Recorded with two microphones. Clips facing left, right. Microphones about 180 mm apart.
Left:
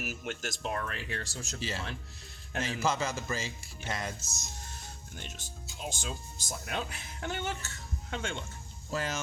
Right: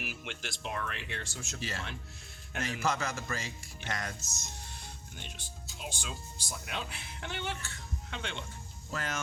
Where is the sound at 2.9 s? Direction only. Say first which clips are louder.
Left 2 dB; 25° left (ahead or behind).